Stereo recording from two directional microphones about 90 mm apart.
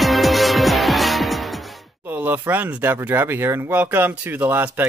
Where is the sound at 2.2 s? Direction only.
20° right (ahead or behind).